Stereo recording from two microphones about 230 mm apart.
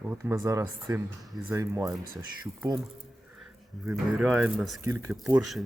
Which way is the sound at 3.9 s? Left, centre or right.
Centre.